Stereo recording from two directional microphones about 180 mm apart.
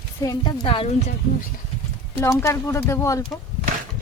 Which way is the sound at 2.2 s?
15° left (ahead or behind).